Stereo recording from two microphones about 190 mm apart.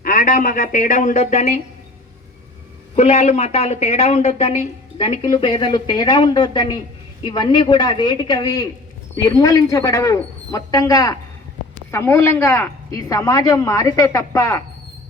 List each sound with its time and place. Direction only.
0.0 s a woman's voice: 45° left (ahead or behind)
2.9 s a woman's voice: 35° left (ahead or behind); by 14.6 s 15° left (ahead or behind)